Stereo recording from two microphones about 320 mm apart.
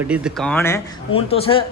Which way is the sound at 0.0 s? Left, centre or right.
Centre.